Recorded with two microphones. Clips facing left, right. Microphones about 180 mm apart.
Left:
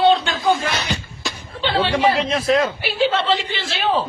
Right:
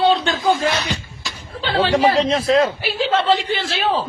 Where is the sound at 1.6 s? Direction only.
40° right (ahead or behind).